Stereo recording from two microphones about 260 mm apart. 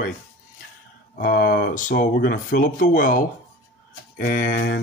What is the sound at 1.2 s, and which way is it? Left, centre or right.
Speech, left.